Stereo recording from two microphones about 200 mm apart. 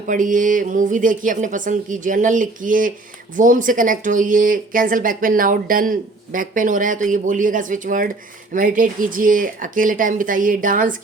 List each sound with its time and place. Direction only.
0.1 s speech: 40° right (ahead or behind)